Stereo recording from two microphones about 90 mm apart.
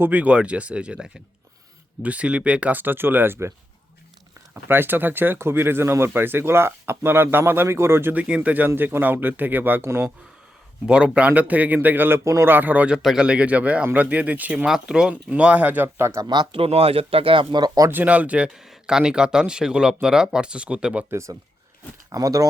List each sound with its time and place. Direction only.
0.0 s speech: 15° right (ahead or behind)
4.7 s speech: 25° right (ahead or behind)
10.8 s speech: 10° right (ahead or behind)
13.0 s speech: 5° right (ahead or behind); by 16.2 s 30° right (ahead or behind)
16.2 s speech: 55° right (ahead or behind)
16.5 s speech: 90° right
17.5 s speech: 50° right (ahead or behind)
17.8 s speech: 20° right (ahead or behind)
21.1 s speech: 30° right (ahead or behind)